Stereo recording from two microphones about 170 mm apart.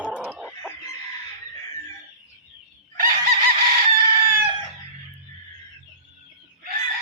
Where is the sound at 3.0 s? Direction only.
55° right (ahead or behind).